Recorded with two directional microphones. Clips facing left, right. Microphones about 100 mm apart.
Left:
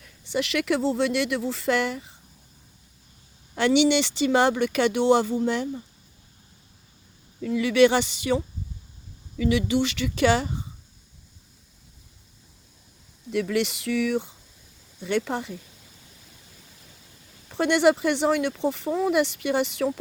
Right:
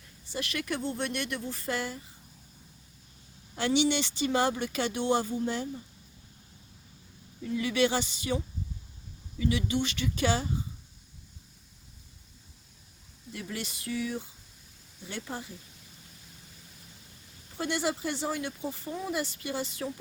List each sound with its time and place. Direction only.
0.0 s speech: 90° left
3.5 s speech: 85° left
7.4 s speech: 90° left
9.4 s speech: 90° left
13.3 s speech: 85° left
17.5 s speech: 75° left (ahead or behind)